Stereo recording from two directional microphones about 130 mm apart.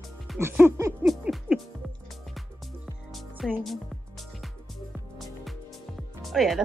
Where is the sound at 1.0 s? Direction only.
5° right (ahead or behind).